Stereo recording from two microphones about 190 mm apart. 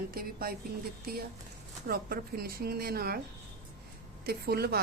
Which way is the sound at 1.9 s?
50° right (ahead or behind).